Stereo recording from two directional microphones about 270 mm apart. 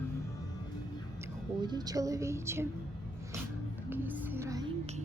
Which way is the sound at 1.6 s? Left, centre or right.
Centre.